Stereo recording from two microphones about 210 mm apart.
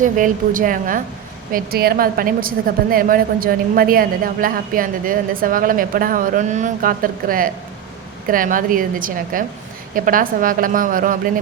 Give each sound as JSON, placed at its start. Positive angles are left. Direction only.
{"t": 0.0, "sound": "a woman's voice", "side_deg": -40}